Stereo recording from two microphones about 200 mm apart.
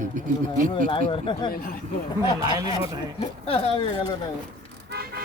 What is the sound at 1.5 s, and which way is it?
Speech, 50° left (ahead or behind).